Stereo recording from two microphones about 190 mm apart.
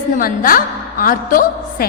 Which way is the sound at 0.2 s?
50° left (ahead or behind).